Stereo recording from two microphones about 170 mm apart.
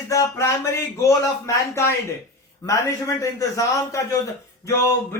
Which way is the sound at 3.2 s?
20° left (ahead or behind).